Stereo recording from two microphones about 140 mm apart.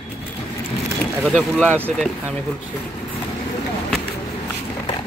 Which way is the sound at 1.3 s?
5° left (ahead or behind).